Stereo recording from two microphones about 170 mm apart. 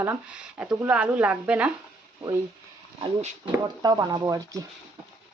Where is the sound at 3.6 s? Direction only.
25° right (ahead or behind).